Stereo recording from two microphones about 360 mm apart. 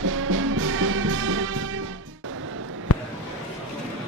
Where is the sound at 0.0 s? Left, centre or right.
Right.